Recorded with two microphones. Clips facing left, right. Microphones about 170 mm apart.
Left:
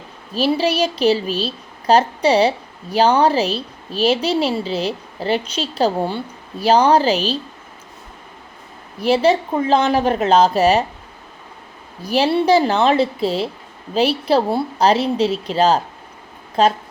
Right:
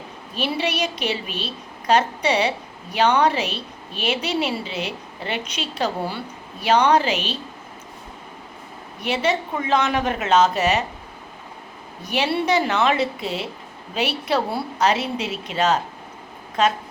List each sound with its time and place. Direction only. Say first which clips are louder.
0.3 s a woman's voice: left 7 dB; 35° left (ahead or behind)
9.0 s a woman's voice: left 7 dB; 35° left (ahead or behind)
12.0 s a woman's voice: left 6 dB; 35° left (ahead or behind)